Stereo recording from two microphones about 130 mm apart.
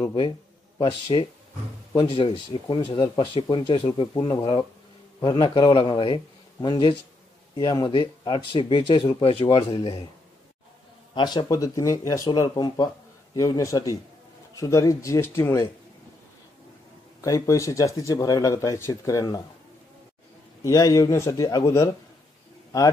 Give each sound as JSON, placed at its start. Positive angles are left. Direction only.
{"t": 0.7, "sound": "speech", "side_deg": 45}
{"t": 11.1, "sound": "speech", "side_deg": 35}
{"t": 12.3, "sound": "speech", "side_deg": 35}
{"t": 17.2, "sound": "speech", "side_deg": 25}
{"t": 20.6, "sound": "speech", "side_deg": 25}